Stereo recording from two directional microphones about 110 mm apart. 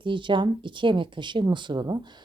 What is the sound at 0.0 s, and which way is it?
A woman's voice, 45° right (ahead or behind).